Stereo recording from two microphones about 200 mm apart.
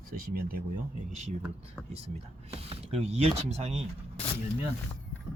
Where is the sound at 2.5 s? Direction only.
30° right (ahead or behind).